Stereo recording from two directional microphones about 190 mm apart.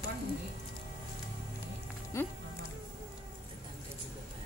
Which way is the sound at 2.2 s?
15° left (ahead or behind).